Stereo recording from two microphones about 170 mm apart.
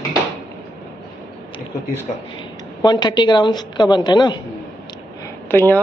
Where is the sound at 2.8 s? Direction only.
25° left (ahead or behind).